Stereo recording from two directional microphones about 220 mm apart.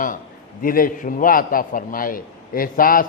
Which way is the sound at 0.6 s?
40° left (ahead or behind).